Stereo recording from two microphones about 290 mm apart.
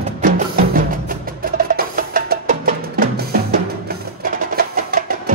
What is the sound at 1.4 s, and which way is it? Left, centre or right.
Music, right.